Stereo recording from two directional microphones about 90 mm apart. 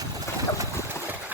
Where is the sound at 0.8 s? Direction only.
30° left (ahead or behind).